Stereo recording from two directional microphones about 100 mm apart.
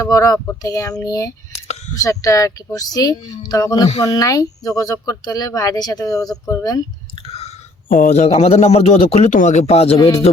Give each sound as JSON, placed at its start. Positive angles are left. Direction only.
{"t": 0.0, "sound": "speech", "side_deg": 35}
{"t": 7.2, "sound": "chewing", "side_deg": 90}
{"t": 8.1, "sound": "a man's voice", "side_deg": 90}